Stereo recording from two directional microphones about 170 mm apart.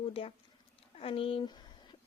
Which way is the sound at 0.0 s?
35° left (ahead or behind).